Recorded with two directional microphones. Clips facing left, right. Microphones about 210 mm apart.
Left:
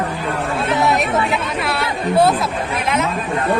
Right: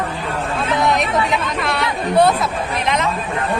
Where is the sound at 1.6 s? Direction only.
5° left (ahead or behind).